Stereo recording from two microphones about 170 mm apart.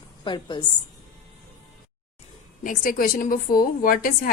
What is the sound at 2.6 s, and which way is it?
A woman's voice, 55° left (ahead or behind).